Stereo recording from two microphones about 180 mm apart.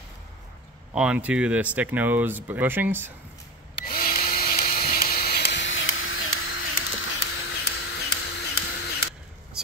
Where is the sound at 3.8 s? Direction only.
55° left (ahead or behind); by 6.8 s 90° left.